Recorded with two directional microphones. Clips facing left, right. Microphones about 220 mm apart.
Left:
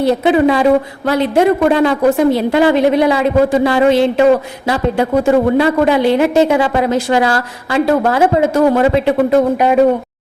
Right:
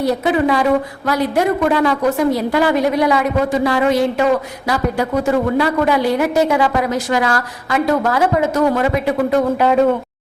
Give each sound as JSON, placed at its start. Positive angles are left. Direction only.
{"t": 0.0, "sound": "speech", "side_deg": 25}